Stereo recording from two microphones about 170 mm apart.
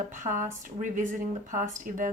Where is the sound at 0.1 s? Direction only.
50° right (ahead or behind).